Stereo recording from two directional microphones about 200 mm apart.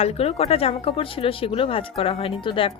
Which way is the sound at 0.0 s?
30° left (ahead or behind).